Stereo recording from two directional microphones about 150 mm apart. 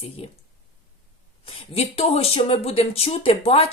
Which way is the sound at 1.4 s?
40° left (ahead or behind).